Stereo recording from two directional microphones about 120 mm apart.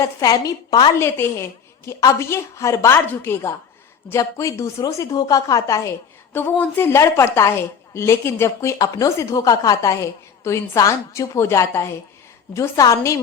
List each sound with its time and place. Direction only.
0.0 s a woman's voice: 30° left (ahead or behind)
0.9 s speech: 20° left (ahead or behind)
6.3 s speech: 15° left (ahead or behind)